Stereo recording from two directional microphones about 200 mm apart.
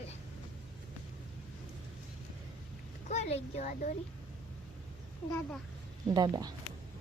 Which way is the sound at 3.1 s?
30° left (ahead or behind).